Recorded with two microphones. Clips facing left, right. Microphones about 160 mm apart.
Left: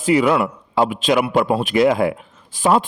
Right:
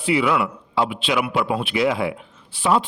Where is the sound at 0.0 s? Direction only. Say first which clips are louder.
Left 4 dB; 40° left (ahead or behind).